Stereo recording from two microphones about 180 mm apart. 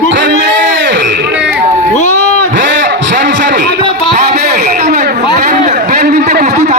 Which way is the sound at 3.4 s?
50° right (ahead or behind).